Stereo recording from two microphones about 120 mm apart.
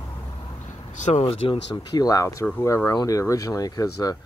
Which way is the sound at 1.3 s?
35° left (ahead or behind).